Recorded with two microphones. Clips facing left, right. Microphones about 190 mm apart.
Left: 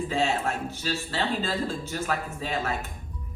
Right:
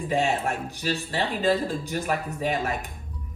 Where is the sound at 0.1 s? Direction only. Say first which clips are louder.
Right 4 dB; 15° right (ahead or behind).